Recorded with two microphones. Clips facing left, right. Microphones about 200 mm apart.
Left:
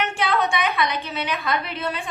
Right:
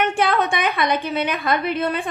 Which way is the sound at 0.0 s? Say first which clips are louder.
Right 3 dB; 55° right (ahead or behind).